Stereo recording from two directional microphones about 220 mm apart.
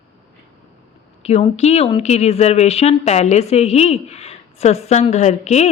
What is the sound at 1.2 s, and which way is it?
A woman's voice, 30° left (ahead or behind).